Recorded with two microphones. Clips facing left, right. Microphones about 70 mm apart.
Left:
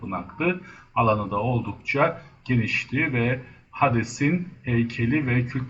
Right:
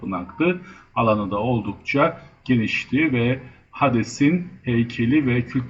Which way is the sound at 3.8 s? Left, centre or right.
Centre.